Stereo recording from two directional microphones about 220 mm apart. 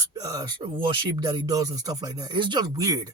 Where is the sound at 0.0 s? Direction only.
15° right (ahead or behind).